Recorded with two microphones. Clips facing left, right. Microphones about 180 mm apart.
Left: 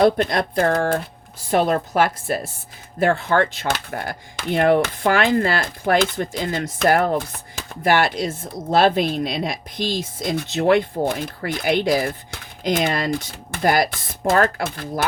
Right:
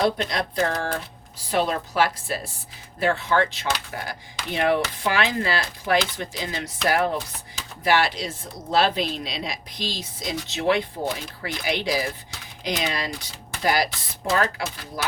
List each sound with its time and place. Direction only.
0.0 s speech: 55° left (ahead or behind)